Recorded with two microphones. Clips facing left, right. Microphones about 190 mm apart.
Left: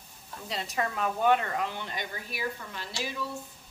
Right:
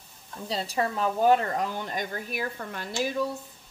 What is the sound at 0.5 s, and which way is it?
A woman's voice, 30° right (ahead or behind).